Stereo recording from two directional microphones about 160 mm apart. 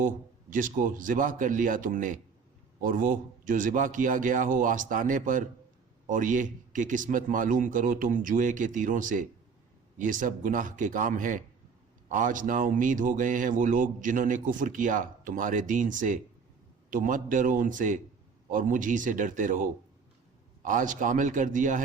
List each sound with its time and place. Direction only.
0.5 s a man's voice: 55° right (ahead or behind)